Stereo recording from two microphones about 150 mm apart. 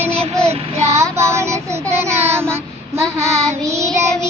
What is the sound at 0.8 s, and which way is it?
Child singing, 20° right (ahead or behind).